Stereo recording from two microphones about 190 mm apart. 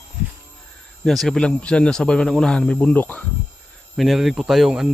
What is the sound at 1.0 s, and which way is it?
Speech, centre (ahead or behind).